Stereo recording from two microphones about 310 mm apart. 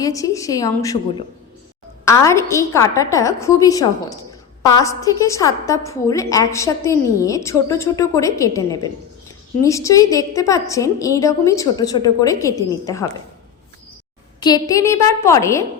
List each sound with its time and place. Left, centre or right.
0.0 s a woman's voice: centre
14.4 s a woman's voice: centre